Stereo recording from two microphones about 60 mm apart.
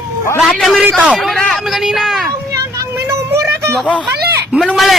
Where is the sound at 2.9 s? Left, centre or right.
Right.